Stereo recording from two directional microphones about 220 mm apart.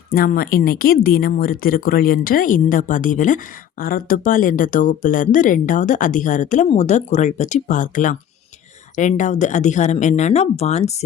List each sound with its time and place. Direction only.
0.1 s speech: 40° left (ahead or behind)